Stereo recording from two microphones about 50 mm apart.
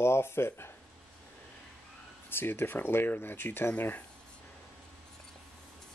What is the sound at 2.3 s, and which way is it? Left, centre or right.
Speech, left.